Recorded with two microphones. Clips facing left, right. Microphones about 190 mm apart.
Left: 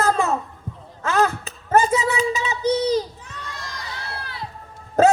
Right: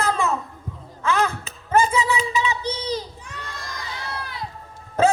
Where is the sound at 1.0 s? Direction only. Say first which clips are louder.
Left 2 dB; 40° left (ahead or behind).